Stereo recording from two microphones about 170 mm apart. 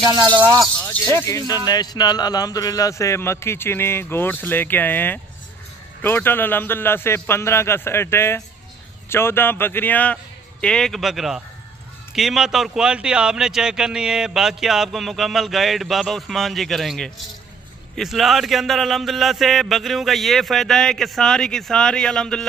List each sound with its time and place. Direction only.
0.0 s speech: 20° right (ahead or behind)
1.5 s a man's voice: 20° left (ahead or behind); by 22.5 s 5° left (ahead or behind)